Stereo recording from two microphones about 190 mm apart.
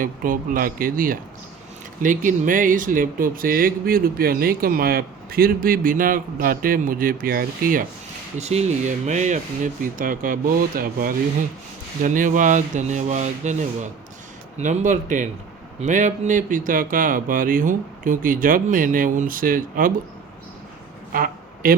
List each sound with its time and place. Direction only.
0.0 s speech: 45° right (ahead or behind)
8.4 s speech: 35° right (ahead or behind)
21.1 s a sound: 50° right (ahead or behind)